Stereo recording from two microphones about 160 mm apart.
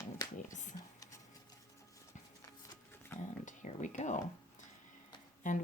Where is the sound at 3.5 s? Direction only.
50° left (ahead or behind).